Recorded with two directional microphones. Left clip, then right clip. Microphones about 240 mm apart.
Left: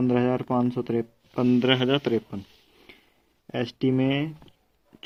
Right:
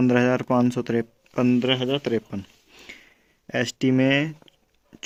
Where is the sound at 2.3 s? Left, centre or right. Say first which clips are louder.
Right 3 dB; right.